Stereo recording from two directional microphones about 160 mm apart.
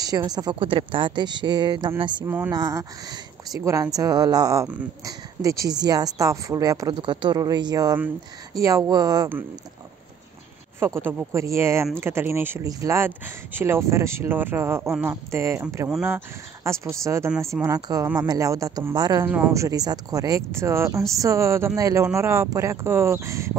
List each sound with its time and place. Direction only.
0.0 s speech: 25° right (ahead or behind)
2.2 s speech: 10° right (ahead or behind)
2.5 s speech: 25° right (ahead or behind)
10.8 s speech: 15° right (ahead or behind)
19.2 s speech: 10° right (ahead or behind)